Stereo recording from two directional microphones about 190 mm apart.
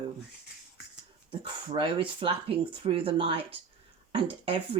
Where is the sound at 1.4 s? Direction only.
25° right (ahead or behind).